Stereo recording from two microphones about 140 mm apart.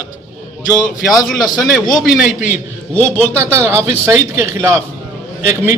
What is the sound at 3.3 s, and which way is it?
A man's voice, 20° right (ahead or behind).